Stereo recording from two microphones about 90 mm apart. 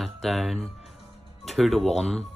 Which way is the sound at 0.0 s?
Centre (ahead or behind).